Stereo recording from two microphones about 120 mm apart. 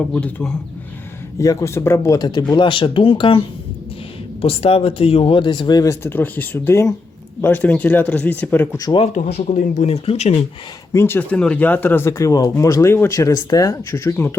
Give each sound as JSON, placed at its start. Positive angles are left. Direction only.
{"t": 0.1, "sound": "speech", "side_deg": 10}
{"t": 1.4, "sound": "speech", "side_deg": 25}
{"t": 2.1, "sound": "speech", "side_deg": 35}
{"t": 9.1, "sound": "speech", "side_deg": 80}
{"t": 10.9, "sound": "speech", "side_deg": 20}